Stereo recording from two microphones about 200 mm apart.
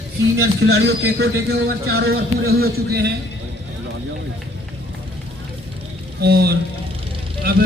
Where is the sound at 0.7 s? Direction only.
55° right (ahead or behind).